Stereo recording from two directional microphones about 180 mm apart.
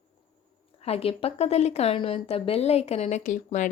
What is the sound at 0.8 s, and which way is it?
Speech, 35° left (ahead or behind).